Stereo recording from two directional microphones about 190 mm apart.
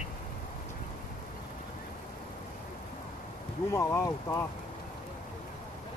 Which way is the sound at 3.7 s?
15° left (ahead or behind).